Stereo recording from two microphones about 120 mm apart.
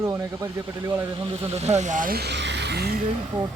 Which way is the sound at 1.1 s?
45° right (ahead or behind).